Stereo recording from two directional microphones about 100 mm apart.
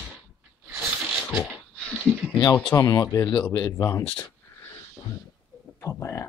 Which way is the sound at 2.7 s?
35° left (ahead or behind).